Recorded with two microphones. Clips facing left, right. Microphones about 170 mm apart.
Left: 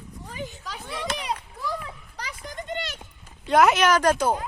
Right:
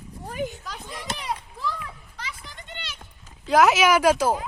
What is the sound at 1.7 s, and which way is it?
Children playing, 40° left (ahead or behind).